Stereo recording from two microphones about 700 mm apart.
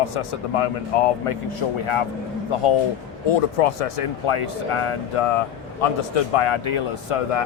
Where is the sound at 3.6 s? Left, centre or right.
Left.